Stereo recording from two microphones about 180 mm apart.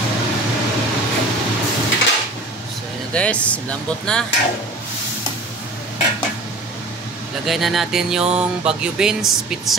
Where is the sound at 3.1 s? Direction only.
5° left (ahead or behind).